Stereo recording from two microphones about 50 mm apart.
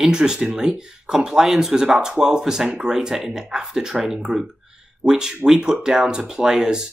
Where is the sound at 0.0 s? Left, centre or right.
Centre.